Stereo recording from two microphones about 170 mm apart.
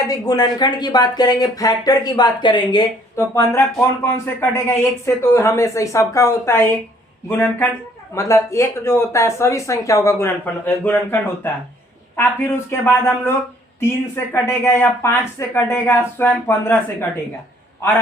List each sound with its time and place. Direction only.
0.1 s speech: 20° left (ahead or behind)
3.2 s speech: 15° left (ahead or behind)
14.3 s speech: 15° left (ahead or behind)